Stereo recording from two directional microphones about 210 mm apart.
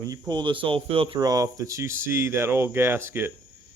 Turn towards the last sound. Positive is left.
turn(degrees=-10)  # may be behind; listen again after turning